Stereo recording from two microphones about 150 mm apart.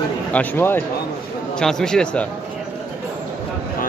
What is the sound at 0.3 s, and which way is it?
A man's voice, 10° left (ahead or behind).